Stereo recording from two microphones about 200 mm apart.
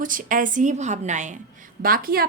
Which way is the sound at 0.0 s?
40° right (ahead or behind).